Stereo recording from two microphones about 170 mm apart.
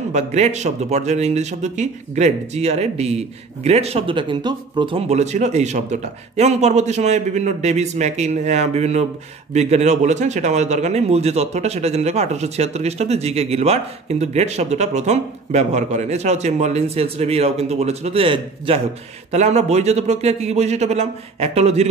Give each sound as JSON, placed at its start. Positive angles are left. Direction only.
{"t": 0.1, "sound": "speech", "side_deg": -40}